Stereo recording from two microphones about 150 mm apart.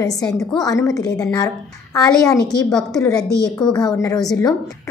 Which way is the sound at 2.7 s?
5° left (ahead or behind).